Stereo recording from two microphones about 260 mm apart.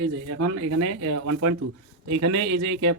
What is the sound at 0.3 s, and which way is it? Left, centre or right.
Speech, right.